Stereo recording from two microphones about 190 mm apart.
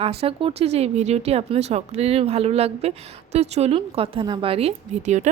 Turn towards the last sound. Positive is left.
turn(degrees=-35)  # may be behind; listen again after turning